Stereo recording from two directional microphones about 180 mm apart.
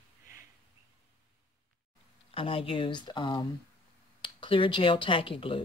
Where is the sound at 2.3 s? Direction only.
30° left (ahead or behind).